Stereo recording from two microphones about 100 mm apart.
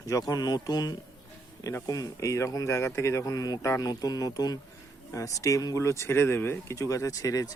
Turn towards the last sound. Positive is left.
turn(degrees=35)  # may be behind; listen again after turning